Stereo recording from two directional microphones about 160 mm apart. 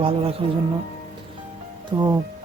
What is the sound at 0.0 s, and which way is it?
Speech, 40° right (ahead or behind).